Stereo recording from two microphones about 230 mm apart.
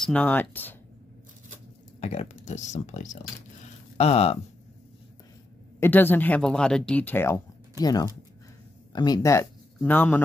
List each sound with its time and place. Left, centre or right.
0.0 s speech: centre
2.0 s speech: left
5.8 s speech: centre